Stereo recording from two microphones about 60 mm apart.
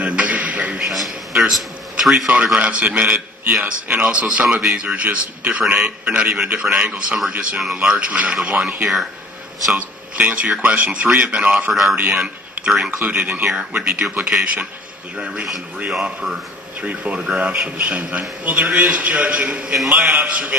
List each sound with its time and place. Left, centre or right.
0.0 s beatboxing: right
0.8 s a man's voice: centre
5.0 s a man's voice: right
7.5 s speech: centre
10.2 s a man's voice: right
11.7 s a man's voice: centre
11.9 s a man's voice: centre
16.8 s a man's voice: right